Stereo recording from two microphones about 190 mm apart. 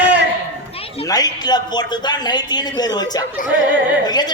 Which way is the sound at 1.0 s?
20° left (ahead or behind).